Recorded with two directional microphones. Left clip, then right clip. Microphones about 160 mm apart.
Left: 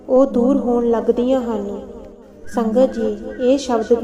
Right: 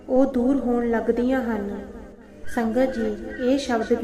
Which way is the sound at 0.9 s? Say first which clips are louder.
Left 6 dB; 30° right (ahead or behind).